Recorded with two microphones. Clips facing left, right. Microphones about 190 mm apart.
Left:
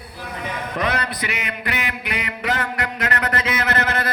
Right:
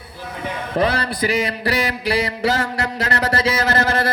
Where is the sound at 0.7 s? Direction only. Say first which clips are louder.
Right 5 dB; 30° right (ahead or behind).